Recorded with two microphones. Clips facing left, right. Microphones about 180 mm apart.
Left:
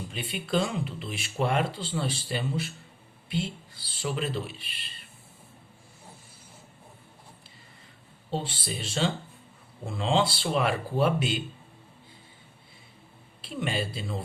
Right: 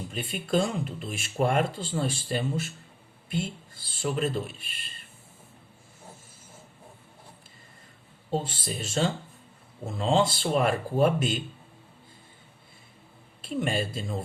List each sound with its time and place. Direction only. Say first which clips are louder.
0.4 s speech: right 2 dB; 45° right (ahead or behind)
8.3 s speech: right 2 dB; 45° right (ahead or behind)
13.4 s speech: right 3 dB; 45° right (ahead or behind)